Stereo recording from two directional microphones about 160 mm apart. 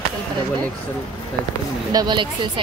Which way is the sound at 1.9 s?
25° right (ahead or behind).